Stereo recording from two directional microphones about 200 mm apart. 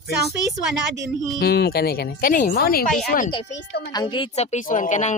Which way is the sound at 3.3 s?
30° left (ahead or behind).